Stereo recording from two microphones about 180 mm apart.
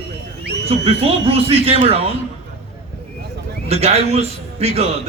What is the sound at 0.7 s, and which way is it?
A man's voice, 35° right (ahead or behind).